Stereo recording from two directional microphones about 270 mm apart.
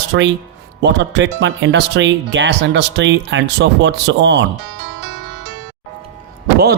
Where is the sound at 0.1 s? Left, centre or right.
Right.